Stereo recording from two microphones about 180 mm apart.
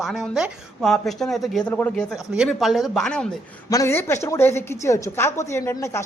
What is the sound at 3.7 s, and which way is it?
A woman's voice, 15° left (ahead or behind).